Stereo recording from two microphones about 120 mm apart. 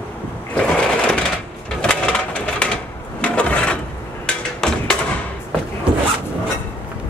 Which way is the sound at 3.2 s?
10° left (ahead or behind).